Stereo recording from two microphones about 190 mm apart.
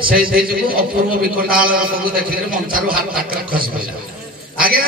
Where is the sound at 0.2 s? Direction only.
50° right (ahead or behind).